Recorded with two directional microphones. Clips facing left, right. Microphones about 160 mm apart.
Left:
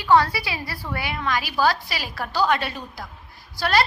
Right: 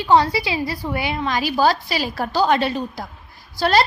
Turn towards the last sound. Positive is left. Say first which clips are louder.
# right 4 dB
turn(degrees=-30)  # may be behind; listen again after turning